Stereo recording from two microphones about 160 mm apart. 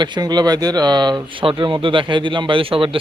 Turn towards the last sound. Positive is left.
turn(degrees=-35)  # may be behind; listen again after turning